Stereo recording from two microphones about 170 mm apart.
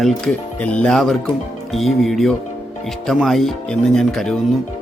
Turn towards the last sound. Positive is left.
turn(degrees=0)  # may be behind; listen again after turning